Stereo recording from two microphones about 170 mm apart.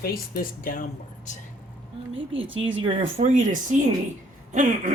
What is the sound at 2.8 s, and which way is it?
Speech, 35° right (ahead or behind).